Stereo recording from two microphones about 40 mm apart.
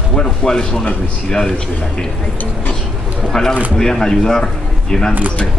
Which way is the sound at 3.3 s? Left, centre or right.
Centre.